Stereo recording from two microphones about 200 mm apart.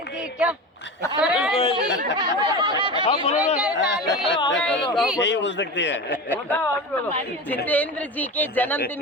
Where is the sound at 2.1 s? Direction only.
20° right (ahead or behind).